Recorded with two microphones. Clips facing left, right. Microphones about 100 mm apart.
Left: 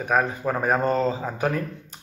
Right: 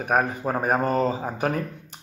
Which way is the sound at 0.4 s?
30° right (ahead or behind).